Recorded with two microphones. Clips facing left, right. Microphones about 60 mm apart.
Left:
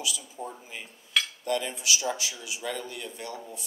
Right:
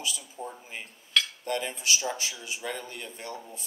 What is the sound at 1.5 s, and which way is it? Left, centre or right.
Speech, right.